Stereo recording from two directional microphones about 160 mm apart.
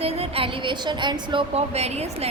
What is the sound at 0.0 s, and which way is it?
A woman's voice, 35° right (ahead or behind).